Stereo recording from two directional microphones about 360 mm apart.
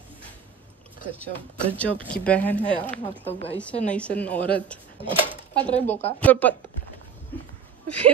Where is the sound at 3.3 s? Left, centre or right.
Centre.